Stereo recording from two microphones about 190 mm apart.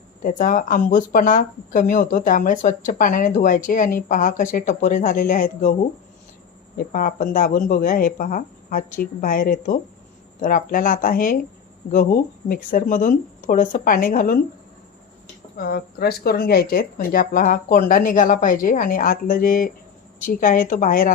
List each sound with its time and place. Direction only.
0.2 s speech: 45° left (ahead or behind)
6.7 s speech: 45° left (ahead or behind)
15.5 s speech: 50° left (ahead or behind)